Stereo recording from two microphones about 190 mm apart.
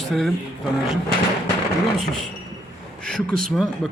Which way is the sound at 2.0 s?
Centre (ahead or behind).